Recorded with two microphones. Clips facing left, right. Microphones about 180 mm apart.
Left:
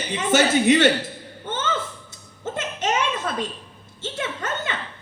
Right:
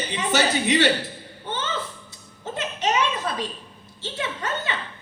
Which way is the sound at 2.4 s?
50° left (ahead or behind).